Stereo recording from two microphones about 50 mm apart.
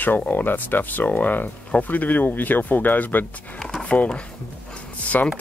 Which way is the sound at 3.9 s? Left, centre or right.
Left.